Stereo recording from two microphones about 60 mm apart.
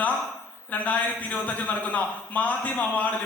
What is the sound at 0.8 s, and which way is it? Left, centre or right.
A man's voice, left.